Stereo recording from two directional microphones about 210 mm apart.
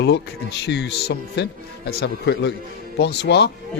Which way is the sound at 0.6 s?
55° left (ahead or behind).